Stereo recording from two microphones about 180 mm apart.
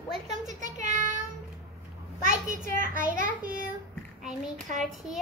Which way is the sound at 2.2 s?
45° right (ahead or behind).